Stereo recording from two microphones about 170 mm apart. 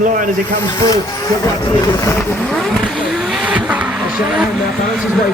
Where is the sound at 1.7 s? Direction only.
20° left (ahead or behind).